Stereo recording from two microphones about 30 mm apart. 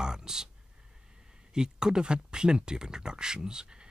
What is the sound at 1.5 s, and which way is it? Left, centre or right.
Speech, right.